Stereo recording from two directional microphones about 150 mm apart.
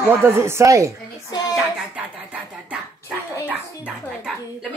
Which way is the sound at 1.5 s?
10° right (ahead or behind).